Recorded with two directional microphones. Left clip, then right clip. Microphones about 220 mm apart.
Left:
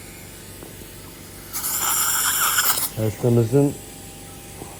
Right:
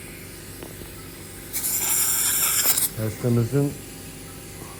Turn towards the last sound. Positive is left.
turn(degrees=45)  # may be behind; listen again after turning